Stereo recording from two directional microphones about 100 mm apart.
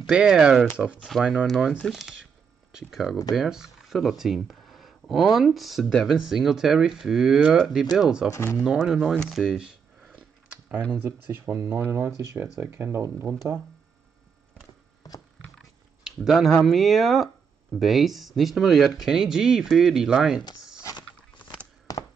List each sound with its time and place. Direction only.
0.1 s speech: 10° right (ahead or behind)
8.3 s speech: 25° left (ahead or behind)
8.5 s speech: 5° right (ahead or behind)
9.3 s camera: 5° right (ahead or behind)
11.1 s speech: 25° right (ahead or behind)
16.3 s speech: centre (ahead or behind)
21.9 s a sound: 40° left (ahead or behind)